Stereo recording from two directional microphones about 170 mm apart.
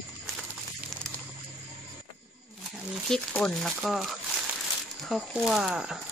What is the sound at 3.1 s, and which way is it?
Speech, 5° left (ahead or behind).